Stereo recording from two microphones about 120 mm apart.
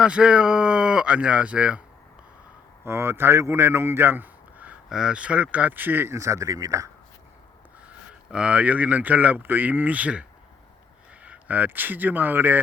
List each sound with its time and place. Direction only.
0.0 s speech: 10° right (ahead or behind)
2.8 s a man's voice: 20° right (ahead or behind)
7.9 s speech: 10° right (ahead or behind)